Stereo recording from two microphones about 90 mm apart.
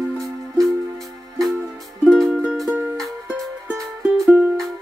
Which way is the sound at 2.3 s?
10° right (ahead or behind).